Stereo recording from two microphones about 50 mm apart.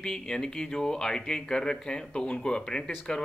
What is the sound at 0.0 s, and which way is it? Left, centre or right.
Speech, centre.